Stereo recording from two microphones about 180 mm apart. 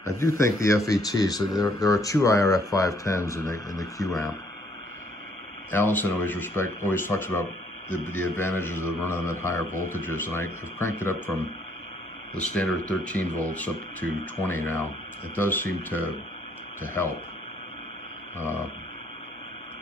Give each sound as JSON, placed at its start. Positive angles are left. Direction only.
{"t": 0.4, "sound": "speech", "side_deg": 15}
{"t": 5.7, "sound": "speech", "side_deg": 10}